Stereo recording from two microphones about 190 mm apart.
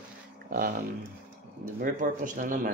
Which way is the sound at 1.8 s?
45° right (ahead or behind).